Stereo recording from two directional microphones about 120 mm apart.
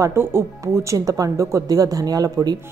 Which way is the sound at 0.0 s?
20° right (ahead or behind).